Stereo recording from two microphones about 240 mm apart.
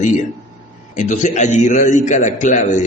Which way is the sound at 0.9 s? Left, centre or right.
Left.